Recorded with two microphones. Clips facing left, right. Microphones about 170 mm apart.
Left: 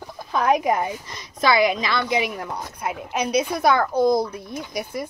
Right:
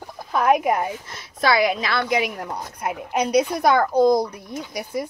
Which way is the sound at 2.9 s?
20° right (ahead or behind).